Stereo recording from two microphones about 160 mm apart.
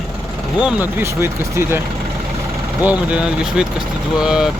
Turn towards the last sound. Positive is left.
turn(degrees=-5)  # may be behind; listen again after turning